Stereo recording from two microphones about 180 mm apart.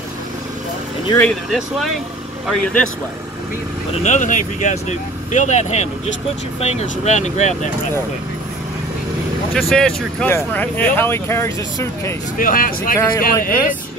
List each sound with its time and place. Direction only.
1.5 s speech: centre (ahead or behind)
4.0 s speech: 45° left (ahead or behind)
9.5 s speech: centre (ahead or behind)
12.4 s speech: 50° left (ahead or behind)